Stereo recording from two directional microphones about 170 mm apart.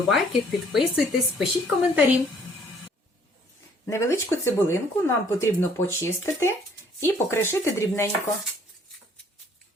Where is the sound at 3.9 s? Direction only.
15° left (ahead or behind).